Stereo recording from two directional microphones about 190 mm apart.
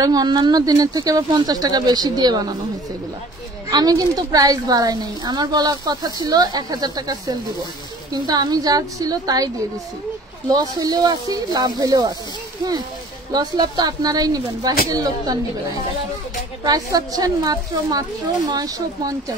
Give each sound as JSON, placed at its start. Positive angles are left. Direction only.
{"t": 0.0, "sound": "a woman's voice", "side_deg": -20}
{"t": 3.7, "sound": "a woman's voice", "side_deg": -20}
{"t": 10.5, "sound": "a woman's voice", "side_deg": -20}
{"t": 13.3, "sound": "a woman's voice", "side_deg": -20}